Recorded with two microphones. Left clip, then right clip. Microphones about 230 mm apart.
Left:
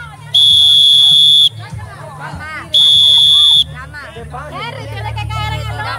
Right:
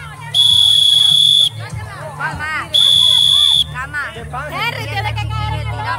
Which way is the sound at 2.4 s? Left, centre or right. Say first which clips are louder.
Right 4 dB; right.